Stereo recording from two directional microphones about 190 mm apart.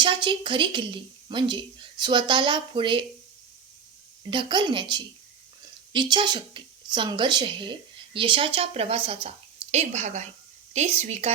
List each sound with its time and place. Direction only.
0.0 s a woman's voice: 25° right (ahead or behind)
4.3 s a woman's voice: 25° right (ahead or behind)